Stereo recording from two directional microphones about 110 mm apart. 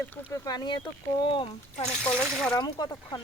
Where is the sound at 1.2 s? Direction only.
50° left (ahead or behind).